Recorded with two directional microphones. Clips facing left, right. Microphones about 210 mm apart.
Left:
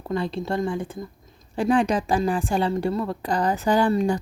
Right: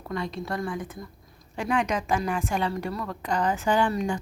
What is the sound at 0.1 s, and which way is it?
A woman's voice, 30° left (ahead or behind).